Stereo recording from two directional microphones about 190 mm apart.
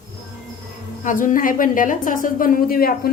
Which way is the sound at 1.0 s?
45° left (ahead or behind).